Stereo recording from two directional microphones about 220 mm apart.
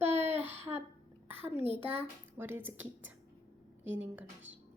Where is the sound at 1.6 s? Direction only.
30° right (ahead or behind).